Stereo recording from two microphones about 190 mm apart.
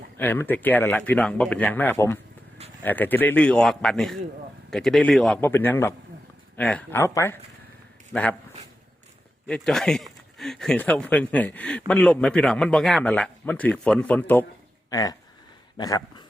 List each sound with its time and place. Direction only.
0.2 s a man's voice: 10° left (ahead or behind)
9.5 s a man's voice: 5° left (ahead or behind)
14.8 s speech: 20° left (ahead or behind)